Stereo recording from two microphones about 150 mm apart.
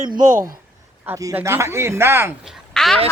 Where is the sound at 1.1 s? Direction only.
20° right (ahead or behind).